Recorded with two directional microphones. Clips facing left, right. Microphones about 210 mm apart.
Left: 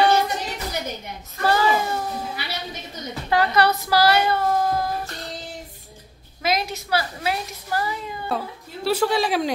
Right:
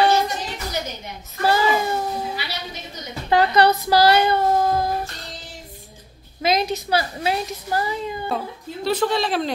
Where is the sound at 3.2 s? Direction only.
20° right (ahead or behind).